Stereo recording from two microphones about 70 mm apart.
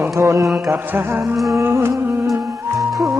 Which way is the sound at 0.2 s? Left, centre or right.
Right.